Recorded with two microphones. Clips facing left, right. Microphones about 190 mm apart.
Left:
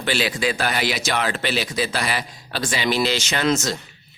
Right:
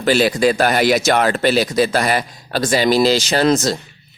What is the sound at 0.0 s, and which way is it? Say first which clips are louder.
Speech: right 8 dB; 40° right (ahead or behind).